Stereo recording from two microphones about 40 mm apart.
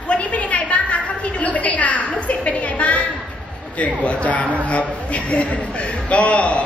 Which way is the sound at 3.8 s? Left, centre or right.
Left.